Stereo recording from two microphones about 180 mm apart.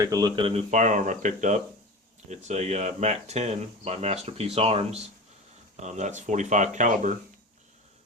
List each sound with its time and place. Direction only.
0.0 s speech: 20° right (ahead or behind)
0.7 s speech: 45° right (ahead or behind)